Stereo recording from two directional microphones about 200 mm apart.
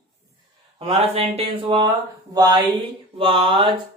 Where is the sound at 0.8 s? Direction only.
30° right (ahead or behind).